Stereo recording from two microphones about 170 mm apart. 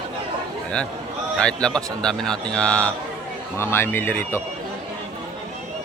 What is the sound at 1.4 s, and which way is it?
A man's voice, 5° left (ahead or behind).